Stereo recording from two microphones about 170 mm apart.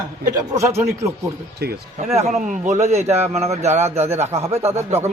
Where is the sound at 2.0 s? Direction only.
40° right (ahead or behind).